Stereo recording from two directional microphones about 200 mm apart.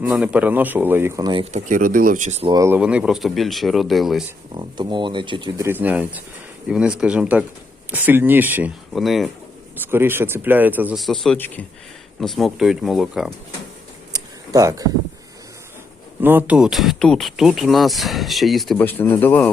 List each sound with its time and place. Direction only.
0.0 s speech: 5° right (ahead or behind)
1.5 s speech: 40° right (ahead or behind)
2.5 s speech: 15° right (ahead or behind)
4.5 s speech: 25° right (ahead or behind)
5.6 s speech: 10° right (ahead or behind)
9.9 s speech: 10° right (ahead or behind)
14.1 s a sound: 15° right (ahead or behind)
16.2 s speech: 10° right (ahead or behind); by 19.5 s 10° left (ahead or behind)